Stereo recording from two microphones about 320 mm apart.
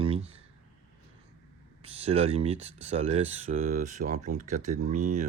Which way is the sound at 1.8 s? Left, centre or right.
Centre.